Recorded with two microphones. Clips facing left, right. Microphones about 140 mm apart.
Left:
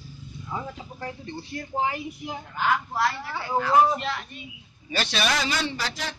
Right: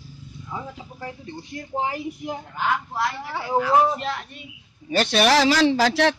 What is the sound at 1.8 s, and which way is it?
Speech, 35° right (ahead or behind).